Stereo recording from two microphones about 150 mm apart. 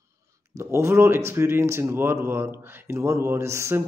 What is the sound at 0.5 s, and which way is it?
Speech, 20° right (ahead or behind).